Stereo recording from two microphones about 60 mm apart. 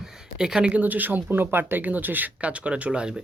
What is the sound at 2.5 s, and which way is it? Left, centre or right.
Speech, centre.